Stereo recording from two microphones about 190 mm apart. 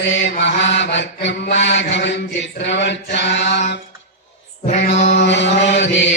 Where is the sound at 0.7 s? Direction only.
70° left (ahead or behind).